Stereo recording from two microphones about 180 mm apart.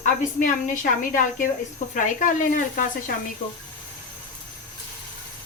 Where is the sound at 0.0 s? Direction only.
45° left (ahead or behind).